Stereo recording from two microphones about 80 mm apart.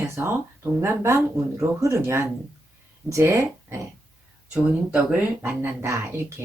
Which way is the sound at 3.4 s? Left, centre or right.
Right.